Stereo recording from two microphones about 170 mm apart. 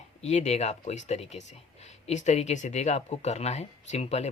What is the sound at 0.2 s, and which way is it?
Speech, 40° left (ahead or behind).